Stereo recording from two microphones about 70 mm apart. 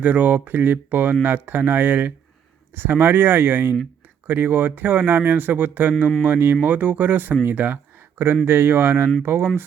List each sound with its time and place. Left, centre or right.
0.0 s speech: right